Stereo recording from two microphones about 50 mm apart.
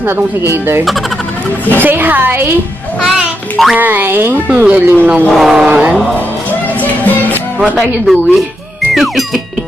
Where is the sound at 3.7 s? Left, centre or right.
Right.